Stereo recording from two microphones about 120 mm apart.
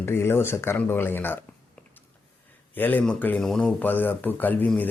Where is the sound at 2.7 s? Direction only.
15° left (ahead or behind).